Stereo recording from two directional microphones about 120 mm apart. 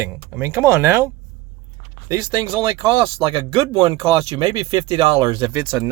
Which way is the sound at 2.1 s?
30° right (ahead or behind).